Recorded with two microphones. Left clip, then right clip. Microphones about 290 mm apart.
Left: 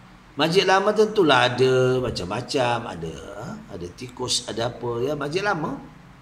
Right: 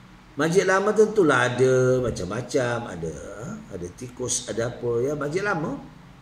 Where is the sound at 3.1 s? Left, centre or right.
Left.